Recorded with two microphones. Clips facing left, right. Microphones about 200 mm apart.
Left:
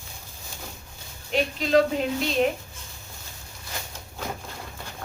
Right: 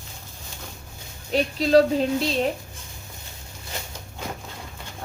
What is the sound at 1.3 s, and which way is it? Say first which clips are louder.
Speech: right 3 dB; 35° right (ahead or behind).